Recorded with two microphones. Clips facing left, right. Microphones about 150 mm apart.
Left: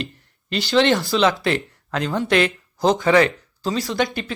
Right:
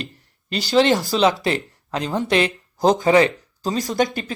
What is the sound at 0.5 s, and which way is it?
Speech, 40° right (ahead or behind).